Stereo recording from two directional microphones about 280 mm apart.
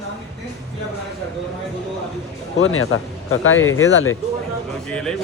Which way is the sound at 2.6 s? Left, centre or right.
Left.